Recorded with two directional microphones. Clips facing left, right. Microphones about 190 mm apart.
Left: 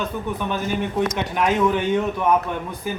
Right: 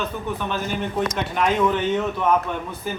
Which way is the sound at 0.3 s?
15° left (ahead or behind).